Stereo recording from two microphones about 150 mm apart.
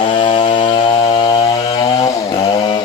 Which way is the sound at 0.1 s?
35° left (ahead or behind).